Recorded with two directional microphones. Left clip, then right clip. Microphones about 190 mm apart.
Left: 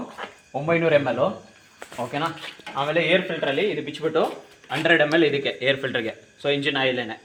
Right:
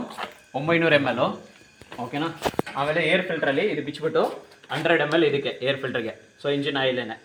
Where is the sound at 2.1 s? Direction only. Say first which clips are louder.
Left 2 dB; 40° left (ahead or behind).